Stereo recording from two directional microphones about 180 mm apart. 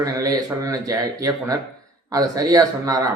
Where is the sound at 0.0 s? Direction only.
20° right (ahead or behind).